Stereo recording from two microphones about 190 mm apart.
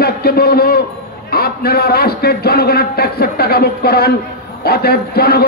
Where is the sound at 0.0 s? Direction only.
55° left (ahead or behind).